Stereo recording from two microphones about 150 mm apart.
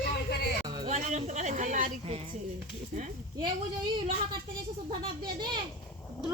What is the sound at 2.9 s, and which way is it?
Speech, 55° right (ahead or behind).